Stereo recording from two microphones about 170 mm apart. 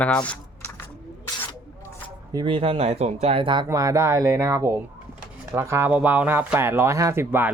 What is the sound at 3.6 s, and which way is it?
Speech, 20° right (ahead or behind).